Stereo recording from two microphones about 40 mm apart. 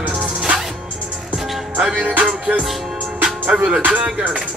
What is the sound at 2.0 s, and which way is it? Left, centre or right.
Music, right.